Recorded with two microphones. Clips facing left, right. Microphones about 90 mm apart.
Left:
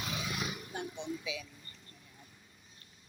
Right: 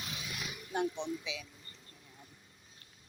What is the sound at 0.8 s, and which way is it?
Speech, 10° left (ahead or behind).